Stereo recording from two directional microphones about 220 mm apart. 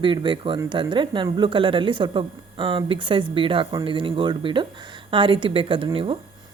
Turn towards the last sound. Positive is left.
turn(degrees=-25)  # may be behind; listen again after turning